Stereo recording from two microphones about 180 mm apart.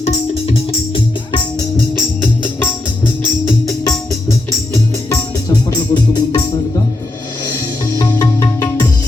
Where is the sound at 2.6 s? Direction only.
10° left (ahead or behind).